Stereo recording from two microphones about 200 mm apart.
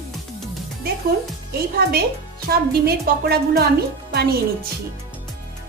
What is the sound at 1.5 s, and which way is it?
A woman's voice, 50° right (ahead or behind).